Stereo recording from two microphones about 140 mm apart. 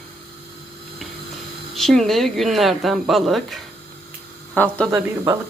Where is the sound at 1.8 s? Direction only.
Centre (ahead or behind).